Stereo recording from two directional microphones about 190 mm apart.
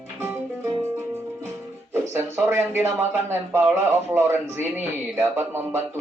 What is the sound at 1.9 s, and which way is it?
Speech, 10° right (ahead or behind).